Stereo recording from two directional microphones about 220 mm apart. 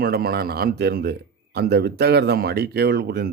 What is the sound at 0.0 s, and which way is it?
Speech, 45° right (ahead or behind).